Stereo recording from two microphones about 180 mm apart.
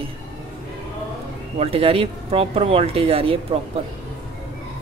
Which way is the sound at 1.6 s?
35° right (ahead or behind).